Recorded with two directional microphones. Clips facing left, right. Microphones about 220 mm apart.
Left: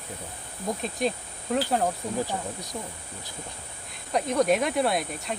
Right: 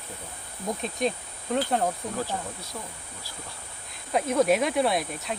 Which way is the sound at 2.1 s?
15° left (ahead or behind).